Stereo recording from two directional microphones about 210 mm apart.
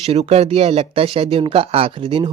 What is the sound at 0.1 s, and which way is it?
Speech, 30° right (ahead or behind).